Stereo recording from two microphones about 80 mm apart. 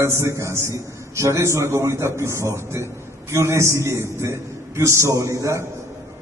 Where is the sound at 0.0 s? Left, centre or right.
Right.